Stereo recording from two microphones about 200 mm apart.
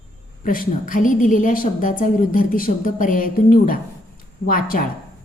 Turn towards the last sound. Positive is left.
turn(degrees=45)  # may be behind; listen again after turning